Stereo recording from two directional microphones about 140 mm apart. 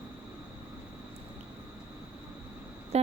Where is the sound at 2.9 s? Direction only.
50° right (ahead or behind).